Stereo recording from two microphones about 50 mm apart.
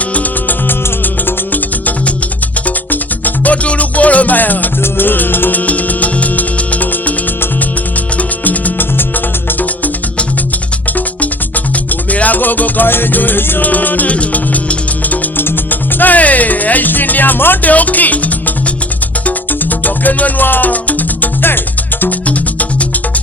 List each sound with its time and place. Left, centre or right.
0.1 s music: left
2.6 s music: left
8.2 s music: left
22.3 s music: left